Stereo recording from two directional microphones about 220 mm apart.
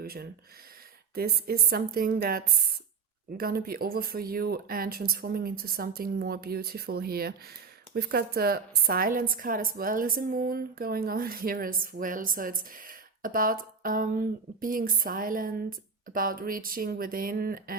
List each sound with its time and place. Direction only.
0.0 s a woman's voice: 45° right (ahead or behind)